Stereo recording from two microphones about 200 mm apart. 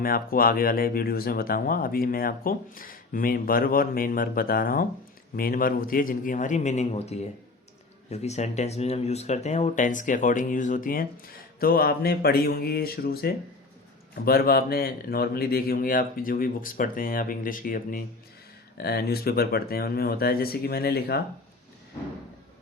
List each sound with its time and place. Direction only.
0.0 s speech: 45° left (ahead or behind)